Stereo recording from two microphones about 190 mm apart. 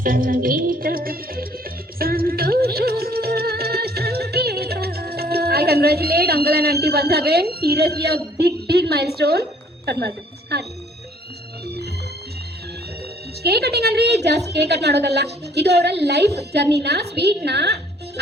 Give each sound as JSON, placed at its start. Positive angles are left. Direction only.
{"t": 0.0, "sound": "music", "side_deg": -45}
{"t": 6.8, "sound": "a woman's voice", "side_deg": -55}
{"t": 13.4, "sound": "a woman's voice", "side_deg": -60}